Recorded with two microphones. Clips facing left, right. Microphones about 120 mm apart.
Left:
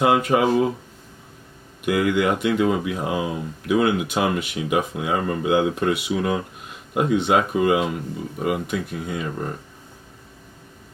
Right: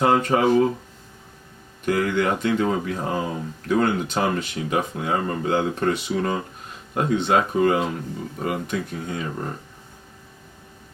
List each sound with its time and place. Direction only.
0.0 s speech: 10° left (ahead or behind)
1.8 s speech: 10° left (ahead or behind)